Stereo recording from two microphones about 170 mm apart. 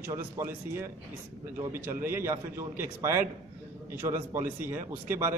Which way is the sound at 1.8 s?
15° right (ahead or behind).